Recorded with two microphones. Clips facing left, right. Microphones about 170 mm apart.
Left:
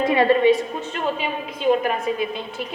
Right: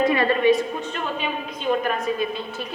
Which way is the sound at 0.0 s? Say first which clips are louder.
Left 2 dB; 25° left (ahead or behind).